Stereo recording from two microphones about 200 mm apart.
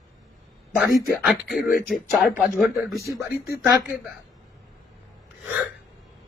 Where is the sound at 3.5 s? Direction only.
15° right (ahead or behind).